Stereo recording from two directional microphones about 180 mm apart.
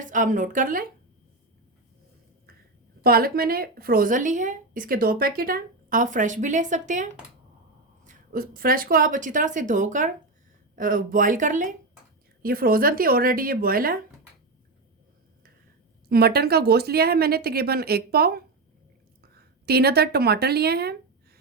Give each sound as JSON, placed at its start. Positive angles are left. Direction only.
{"t": 0.0, "sound": "a woman's voice", "side_deg": -45}
{"t": 3.0, "sound": "a woman's voice", "side_deg": -55}
{"t": 8.0, "sound": "a woman's voice", "side_deg": -55}
{"t": 16.0, "sound": "speech", "side_deg": -60}
{"t": 19.6, "sound": "speech", "side_deg": -60}